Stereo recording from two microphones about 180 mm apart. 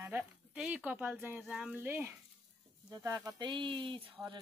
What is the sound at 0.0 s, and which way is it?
Speech, 10° right (ahead or behind).